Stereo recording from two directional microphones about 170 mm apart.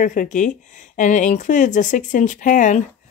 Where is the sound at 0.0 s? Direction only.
50° left (ahead or behind).